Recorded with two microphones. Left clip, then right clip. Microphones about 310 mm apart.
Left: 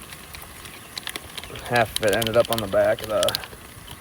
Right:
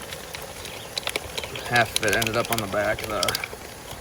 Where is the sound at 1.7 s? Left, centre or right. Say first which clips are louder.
Left 1 dB; centre.